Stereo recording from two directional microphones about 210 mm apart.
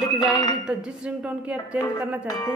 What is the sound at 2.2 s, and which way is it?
Speech, 20° left (ahead or behind).